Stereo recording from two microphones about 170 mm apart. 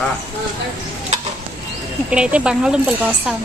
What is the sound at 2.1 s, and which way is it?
Speech, 5° right (ahead or behind).